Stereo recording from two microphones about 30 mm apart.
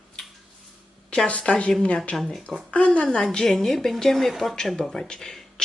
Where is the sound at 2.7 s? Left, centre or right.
Left.